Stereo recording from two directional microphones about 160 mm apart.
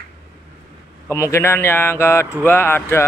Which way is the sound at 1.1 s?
15° left (ahead or behind).